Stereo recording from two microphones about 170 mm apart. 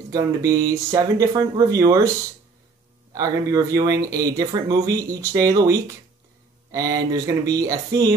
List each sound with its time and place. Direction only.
0.1 s speech: 20° right (ahead or behind)
3.1 s speech: 20° right (ahead or behind)